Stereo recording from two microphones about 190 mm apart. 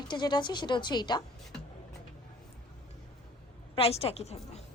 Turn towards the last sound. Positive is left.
turn(degrees=35)  # may be behind; listen again after turning